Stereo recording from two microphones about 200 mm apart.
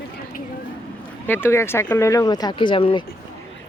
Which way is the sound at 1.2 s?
10° left (ahead or behind).